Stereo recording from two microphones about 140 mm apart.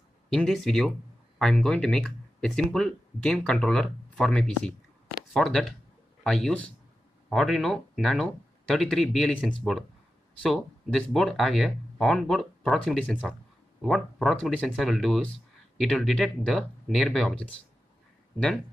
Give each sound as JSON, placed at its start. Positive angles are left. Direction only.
{"t": 0.3, "sound": "speech", "side_deg": 5}